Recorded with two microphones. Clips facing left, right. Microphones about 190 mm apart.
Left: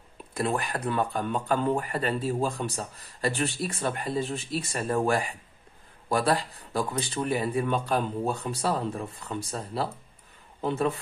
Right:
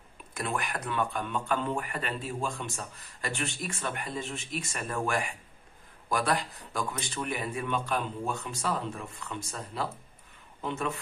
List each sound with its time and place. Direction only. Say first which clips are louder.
0.3 s a man's voice: left 5 dB; 35° left (ahead or behind)